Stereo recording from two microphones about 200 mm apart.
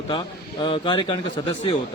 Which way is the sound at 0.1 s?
20° left (ahead or behind).